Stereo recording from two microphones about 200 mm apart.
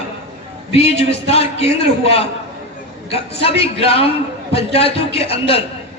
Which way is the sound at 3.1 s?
30° left (ahead or behind).